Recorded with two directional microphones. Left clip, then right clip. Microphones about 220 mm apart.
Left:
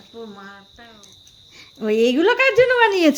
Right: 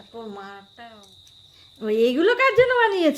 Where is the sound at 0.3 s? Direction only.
55° right (ahead or behind).